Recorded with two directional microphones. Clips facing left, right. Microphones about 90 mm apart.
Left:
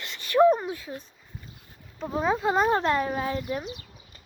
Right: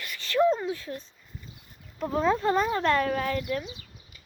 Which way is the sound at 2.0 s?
10° left (ahead or behind).